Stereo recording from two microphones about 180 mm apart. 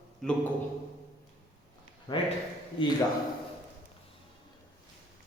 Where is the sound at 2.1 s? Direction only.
20° left (ahead or behind).